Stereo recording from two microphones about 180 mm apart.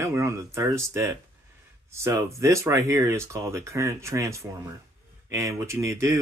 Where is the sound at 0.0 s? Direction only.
15° right (ahead or behind).